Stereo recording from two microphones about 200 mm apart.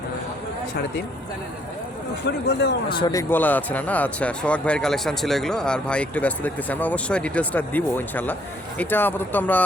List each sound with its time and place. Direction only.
2.2 s speech: 60° left (ahead or behind)
2.9 s speech: 20° left (ahead or behind)